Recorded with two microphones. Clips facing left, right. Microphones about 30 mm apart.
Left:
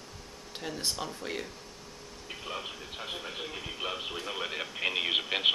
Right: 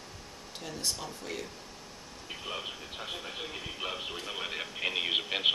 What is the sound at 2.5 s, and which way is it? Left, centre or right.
Speech, centre.